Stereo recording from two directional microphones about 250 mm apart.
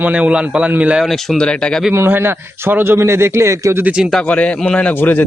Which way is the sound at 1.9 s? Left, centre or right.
Centre.